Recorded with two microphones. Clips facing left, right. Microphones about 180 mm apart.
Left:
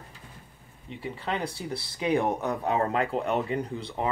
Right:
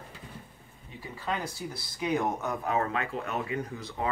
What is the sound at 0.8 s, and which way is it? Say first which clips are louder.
Speech: left 2 dB; 25° left (ahead or behind).